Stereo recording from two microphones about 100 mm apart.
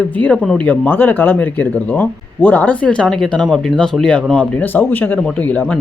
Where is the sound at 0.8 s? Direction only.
20° left (ahead or behind).